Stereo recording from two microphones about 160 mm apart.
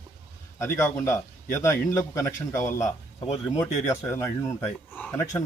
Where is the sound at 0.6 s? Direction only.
15° left (ahead or behind).